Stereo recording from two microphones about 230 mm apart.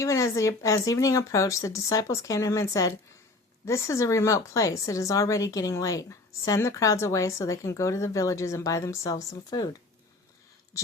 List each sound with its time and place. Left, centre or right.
0.0 s a woman's voice: centre